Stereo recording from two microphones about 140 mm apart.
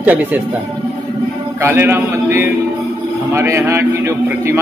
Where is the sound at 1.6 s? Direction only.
15° right (ahead or behind).